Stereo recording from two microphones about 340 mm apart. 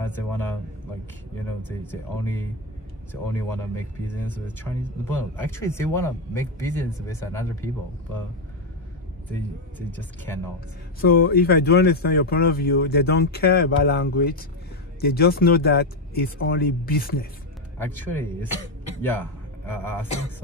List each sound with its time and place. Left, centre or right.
0.0 s a man's voice: centre
1.7 s speech: centre
9.8 s speech: centre
11.0 s speech: left
17.7 s speech: centre